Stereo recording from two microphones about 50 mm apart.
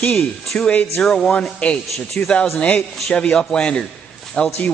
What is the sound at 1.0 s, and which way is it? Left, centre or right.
Speech, centre.